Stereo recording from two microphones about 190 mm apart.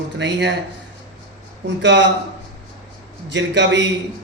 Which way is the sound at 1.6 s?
70° right (ahead or behind).